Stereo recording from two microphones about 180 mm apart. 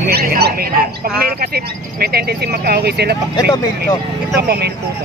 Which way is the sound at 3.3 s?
25° left (ahead or behind).